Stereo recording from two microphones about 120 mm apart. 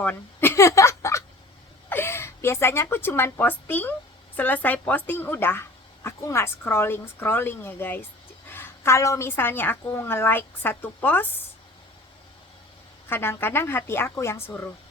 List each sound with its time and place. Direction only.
0.0 s a sound: 15° left (ahead or behind)
1.9 s a woman's voice: 20° left (ahead or behind)
13.1 s a woman's voice: 20° left (ahead or behind)